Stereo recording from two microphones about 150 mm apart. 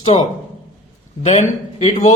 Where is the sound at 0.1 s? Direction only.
45° left (ahead or behind).